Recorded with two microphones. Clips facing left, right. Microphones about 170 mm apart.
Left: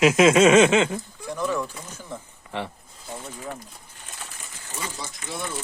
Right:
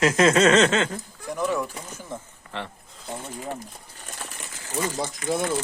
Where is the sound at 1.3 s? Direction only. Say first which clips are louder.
Right 1 dB; 15° right (ahead or behind).